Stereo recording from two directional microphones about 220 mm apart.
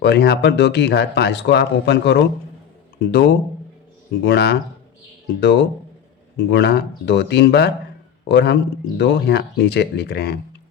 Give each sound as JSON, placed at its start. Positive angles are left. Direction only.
{"t": 0.0, "sound": "speech", "side_deg": 50}